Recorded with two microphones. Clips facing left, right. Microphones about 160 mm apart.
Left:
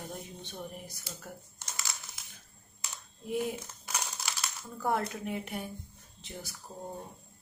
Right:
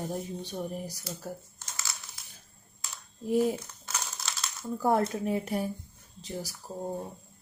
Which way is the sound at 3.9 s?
10° left (ahead or behind).